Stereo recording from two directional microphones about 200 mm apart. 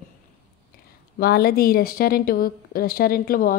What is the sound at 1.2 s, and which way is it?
A woman's voice, 50° left (ahead or behind).